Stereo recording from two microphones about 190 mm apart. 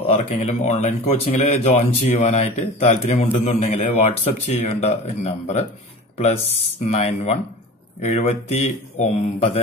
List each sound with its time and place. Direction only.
0.0 s speech: 35° left (ahead or behind)